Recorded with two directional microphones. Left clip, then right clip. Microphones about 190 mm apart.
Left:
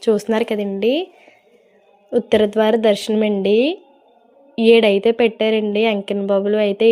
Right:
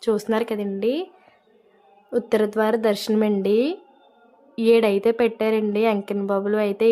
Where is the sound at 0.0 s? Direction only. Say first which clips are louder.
Left 5 dB; 15° left (ahead or behind).